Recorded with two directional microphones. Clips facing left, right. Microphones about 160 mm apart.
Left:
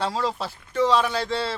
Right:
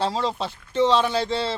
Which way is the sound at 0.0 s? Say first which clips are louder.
Right 1 dB; 25° right (ahead or behind).